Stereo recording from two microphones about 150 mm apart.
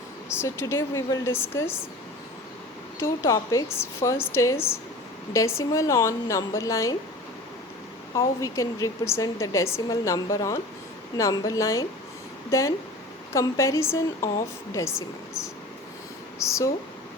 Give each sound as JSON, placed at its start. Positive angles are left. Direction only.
{"t": 0.3, "sound": "a woman's voice", "side_deg": 20}
{"t": 3.0, "sound": "a woman's voice", "side_deg": 20}
{"t": 8.1, "sound": "a woman's voice", "side_deg": 20}
{"t": 16.4, "sound": "a woman's voice", "side_deg": 20}